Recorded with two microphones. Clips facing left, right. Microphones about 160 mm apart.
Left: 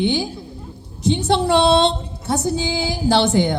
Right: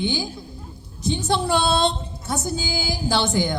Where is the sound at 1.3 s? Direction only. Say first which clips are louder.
Left 6 dB; 30° left (ahead or behind).